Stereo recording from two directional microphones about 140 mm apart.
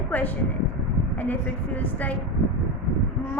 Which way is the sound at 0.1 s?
10° left (ahead or behind).